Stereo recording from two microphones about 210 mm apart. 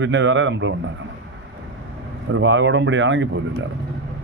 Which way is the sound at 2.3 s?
60° right (ahead or behind).